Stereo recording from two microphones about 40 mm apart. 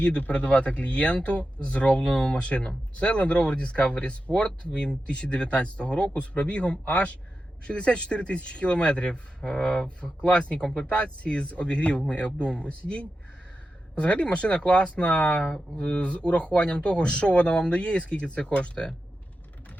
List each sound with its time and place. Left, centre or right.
0.0 s speech: left